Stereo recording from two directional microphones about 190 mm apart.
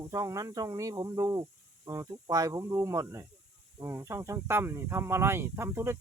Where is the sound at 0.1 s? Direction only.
20° right (ahead or behind).